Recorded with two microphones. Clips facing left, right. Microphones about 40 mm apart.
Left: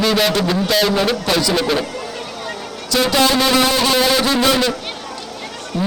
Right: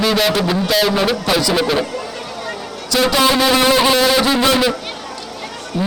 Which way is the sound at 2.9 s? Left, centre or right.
Centre.